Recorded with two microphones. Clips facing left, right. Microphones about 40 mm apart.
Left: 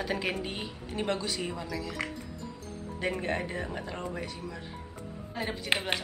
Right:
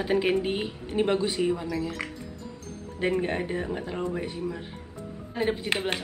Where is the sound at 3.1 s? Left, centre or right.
Centre.